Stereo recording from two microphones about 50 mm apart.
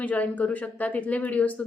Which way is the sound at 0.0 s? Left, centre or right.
Left.